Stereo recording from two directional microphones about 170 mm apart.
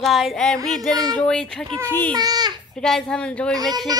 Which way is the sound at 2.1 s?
25° right (ahead or behind).